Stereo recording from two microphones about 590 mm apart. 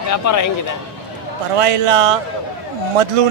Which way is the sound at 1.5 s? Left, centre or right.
Right.